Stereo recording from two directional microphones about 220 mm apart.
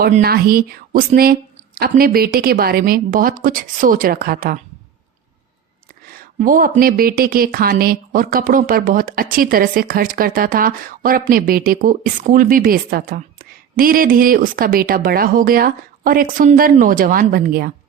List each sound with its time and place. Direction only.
0.0 s speech: 45° right (ahead or behind)
6.1 s speech: 40° right (ahead or behind)